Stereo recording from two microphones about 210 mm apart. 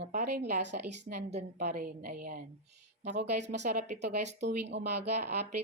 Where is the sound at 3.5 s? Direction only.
35° right (ahead or behind).